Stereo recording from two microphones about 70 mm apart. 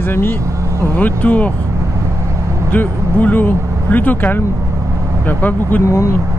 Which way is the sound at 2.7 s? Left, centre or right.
Left.